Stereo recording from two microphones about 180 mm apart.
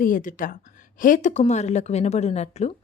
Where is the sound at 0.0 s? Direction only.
50° left (ahead or behind).